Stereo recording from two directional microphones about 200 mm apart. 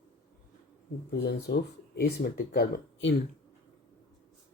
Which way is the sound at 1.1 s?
55° left (ahead or behind).